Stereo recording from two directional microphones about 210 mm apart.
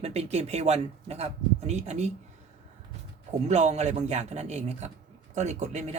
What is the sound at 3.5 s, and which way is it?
Speech, 30° right (ahead or behind).